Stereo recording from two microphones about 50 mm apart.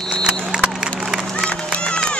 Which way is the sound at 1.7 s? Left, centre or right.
Left.